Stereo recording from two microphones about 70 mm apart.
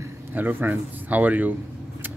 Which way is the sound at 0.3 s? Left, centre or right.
Right.